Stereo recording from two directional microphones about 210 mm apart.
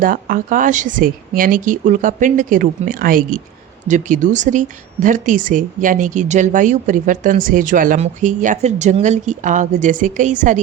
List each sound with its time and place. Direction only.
0.0 s speech: 40° right (ahead or behind)